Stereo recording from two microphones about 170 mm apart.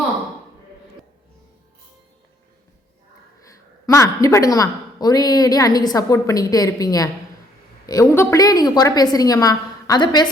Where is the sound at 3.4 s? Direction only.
20° left (ahead or behind).